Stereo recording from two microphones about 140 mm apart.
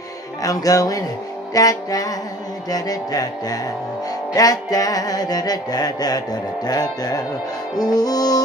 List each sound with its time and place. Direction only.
0.4 s music: 25° left (ahead or behind)